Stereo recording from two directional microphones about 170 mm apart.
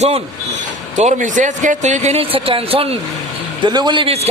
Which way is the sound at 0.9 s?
45° right (ahead or behind).